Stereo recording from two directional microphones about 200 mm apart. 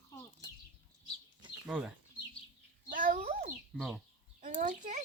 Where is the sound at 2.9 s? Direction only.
45° right (ahead or behind).